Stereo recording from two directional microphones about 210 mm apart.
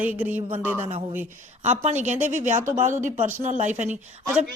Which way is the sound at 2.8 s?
35° right (ahead or behind).